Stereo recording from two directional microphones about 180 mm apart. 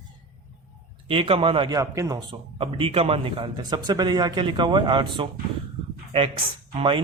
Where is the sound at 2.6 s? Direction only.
30° right (ahead or behind).